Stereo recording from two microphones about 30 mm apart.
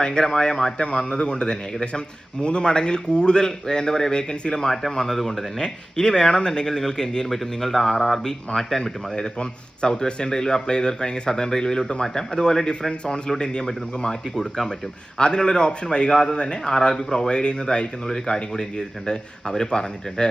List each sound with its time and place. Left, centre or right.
0.0 s a man's voice: left
4.5 s a man's voice: centre
5.5 s a man's voice: left
7.3 s speech: centre
8.5 s a man's voice: left
14.1 s a man's voice: left
16.7 s a man's voice: centre
18.0 s a man's voice: left